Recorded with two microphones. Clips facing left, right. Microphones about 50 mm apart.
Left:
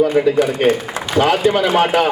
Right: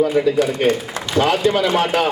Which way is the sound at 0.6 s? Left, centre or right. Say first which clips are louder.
Left 2 dB; left.